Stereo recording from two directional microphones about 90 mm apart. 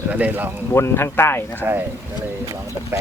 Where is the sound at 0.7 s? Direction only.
25° left (ahead or behind).